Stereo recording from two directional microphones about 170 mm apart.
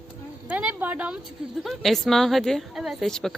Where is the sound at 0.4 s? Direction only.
10° right (ahead or behind).